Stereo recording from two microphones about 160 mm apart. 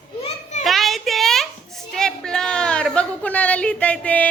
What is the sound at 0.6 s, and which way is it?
A child's voice, centre (ahead or behind).